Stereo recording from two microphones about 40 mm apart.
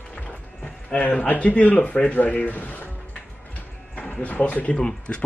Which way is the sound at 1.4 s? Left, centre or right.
Left.